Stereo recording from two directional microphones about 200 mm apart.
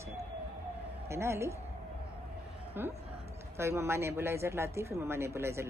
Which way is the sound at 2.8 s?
10° right (ahead or behind).